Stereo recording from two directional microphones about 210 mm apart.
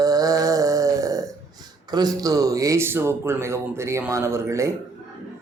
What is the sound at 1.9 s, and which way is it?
Speech, 20° right (ahead or behind).